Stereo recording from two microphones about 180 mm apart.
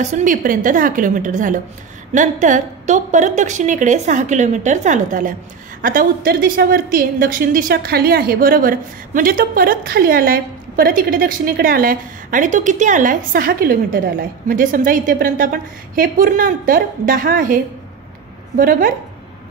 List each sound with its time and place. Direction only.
0.0 s a woman's voice: 45° right (ahead or behind)
18.6 s a woman's voice: 50° right (ahead or behind)